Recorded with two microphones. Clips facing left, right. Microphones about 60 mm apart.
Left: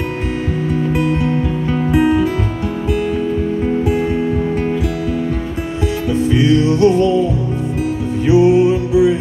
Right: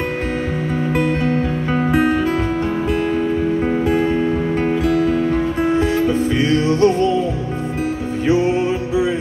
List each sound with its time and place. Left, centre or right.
0.9 s music: right
4.8 s music: right
8.3 s music: right